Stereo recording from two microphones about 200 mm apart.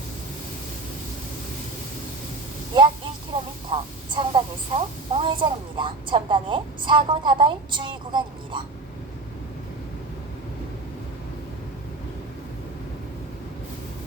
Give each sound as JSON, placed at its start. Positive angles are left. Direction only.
{"t": 3.7, "sound": "a woman's voice", "side_deg": -25}